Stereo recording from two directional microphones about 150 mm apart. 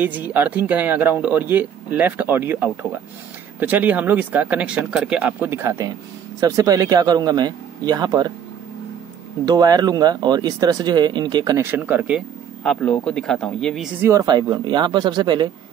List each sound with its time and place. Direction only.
0.0 s speech: 10° right (ahead or behind); by 8.3 s 25° right (ahead or behind)
9.5 s speech: 25° right (ahead or behind); by 12.2 s 10° right (ahead or behind)
12.6 s speech: 5° left (ahead or behind)
14.0 s speech: 25° right (ahead or behind)